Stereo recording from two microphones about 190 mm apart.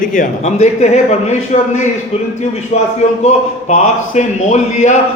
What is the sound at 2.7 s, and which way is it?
A man's voice, 35° left (ahead or behind).